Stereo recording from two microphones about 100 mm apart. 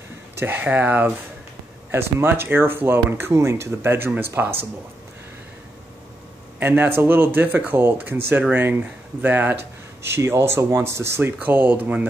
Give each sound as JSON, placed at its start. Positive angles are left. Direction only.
{"t": 0.4, "sound": "speech", "side_deg": -20}
{"t": 6.6, "sound": "speech", "side_deg": -20}